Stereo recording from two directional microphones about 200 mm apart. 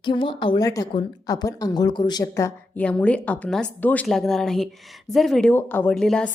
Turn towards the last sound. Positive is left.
turn(degrees=5)  # may be behind; listen again after turning